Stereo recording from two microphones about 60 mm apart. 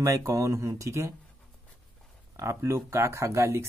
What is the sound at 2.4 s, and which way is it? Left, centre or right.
Speech, right.